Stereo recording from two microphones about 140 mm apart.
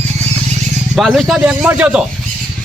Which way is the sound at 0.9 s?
Centre (ahead or behind).